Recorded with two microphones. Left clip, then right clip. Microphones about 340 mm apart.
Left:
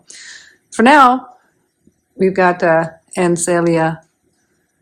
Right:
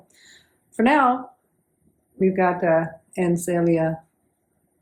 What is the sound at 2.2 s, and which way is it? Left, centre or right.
Speech, left.